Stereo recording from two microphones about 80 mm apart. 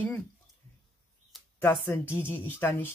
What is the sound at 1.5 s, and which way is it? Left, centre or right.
Speech, left.